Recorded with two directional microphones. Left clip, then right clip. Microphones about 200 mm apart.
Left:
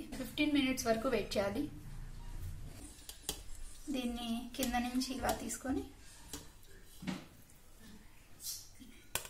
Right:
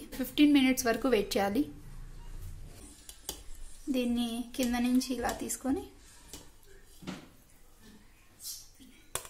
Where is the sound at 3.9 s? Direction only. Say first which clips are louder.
Right 7 dB; 45° right (ahead or behind).